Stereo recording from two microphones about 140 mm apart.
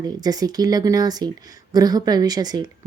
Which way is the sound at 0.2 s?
30° right (ahead or behind).